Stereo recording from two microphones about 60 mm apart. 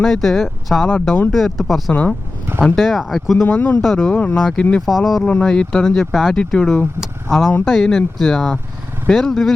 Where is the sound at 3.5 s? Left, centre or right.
Left.